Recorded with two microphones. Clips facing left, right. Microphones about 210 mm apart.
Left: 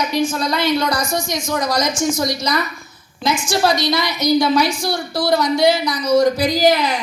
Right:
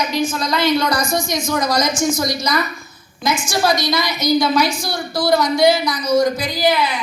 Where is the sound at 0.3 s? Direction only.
30° left (ahead or behind).